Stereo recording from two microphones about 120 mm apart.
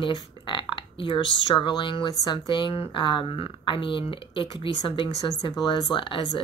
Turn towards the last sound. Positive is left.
turn(degrees=40)  # may be behind; listen again after turning